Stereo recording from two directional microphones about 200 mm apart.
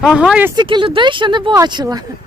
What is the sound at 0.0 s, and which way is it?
Speech, 5° right (ahead or behind).